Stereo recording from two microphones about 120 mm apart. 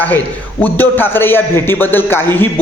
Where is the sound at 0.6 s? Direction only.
15° left (ahead or behind).